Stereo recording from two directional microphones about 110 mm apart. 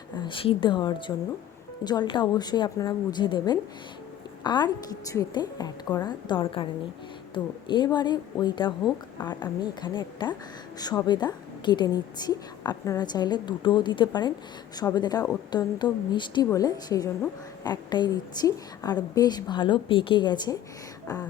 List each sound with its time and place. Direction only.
0.2 s a woman's voice: 50° left (ahead or behind)
16.5 s a woman's voice: 30° left (ahead or behind)